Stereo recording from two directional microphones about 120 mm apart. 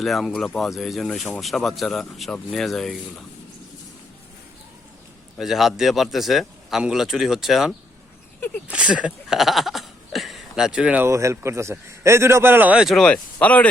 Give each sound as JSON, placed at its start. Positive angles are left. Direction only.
{"t": 0.0, "sound": "speech", "side_deg": 0}
{"t": 5.4, "sound": "speech", "side_deg": 0}
{"t": 11.0, "sound": "a man's voice", "side_deg": -25}
{"t": 13.0, "sound": "speech", "side_deg": 10}